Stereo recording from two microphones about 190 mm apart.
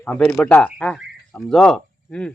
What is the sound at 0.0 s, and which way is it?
Speech, 10° left (ahead or behind).